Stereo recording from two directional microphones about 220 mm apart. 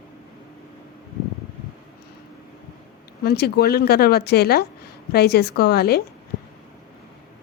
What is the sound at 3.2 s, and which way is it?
Speech, 45° left (ahead or behind).